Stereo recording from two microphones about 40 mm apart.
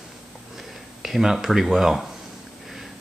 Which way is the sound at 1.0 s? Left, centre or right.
Centre.